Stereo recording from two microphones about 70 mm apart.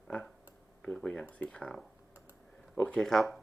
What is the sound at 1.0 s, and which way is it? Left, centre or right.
Speech, centre.